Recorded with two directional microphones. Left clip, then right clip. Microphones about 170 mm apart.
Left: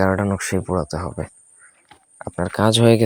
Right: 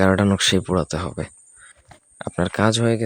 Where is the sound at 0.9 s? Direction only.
15° right (ahead or behind).